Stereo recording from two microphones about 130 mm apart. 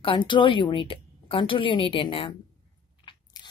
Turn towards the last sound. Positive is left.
turn(degrees=35)  # may be behind; listen again after turning